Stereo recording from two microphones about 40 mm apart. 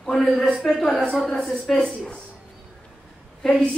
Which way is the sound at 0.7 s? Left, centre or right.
Centre.